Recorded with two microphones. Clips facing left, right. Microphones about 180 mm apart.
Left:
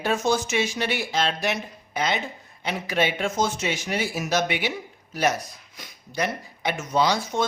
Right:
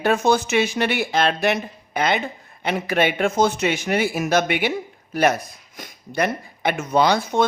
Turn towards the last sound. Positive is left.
turn(degrees=-60)  # may be behind; listen again after turning